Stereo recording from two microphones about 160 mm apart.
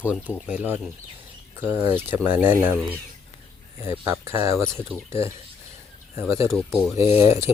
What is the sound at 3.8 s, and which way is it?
Speech, 15° right (ahead or behind).